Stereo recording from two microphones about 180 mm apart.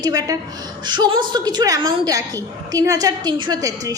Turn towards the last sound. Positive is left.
turn(degrees=-20)  # may be behind; listen again after turning